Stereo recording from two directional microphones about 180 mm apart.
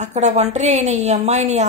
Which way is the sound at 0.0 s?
40° right (ahead or behind).